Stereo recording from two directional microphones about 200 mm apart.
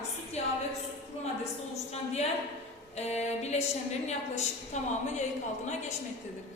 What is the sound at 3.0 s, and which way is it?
A woman's voice, 35° left (ahead or behind).